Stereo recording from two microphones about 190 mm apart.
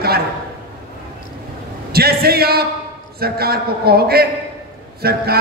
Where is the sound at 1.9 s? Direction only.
55° right (ahead or behind).